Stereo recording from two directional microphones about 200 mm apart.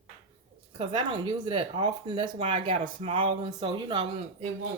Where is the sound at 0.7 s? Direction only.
25° right (ahead or behind).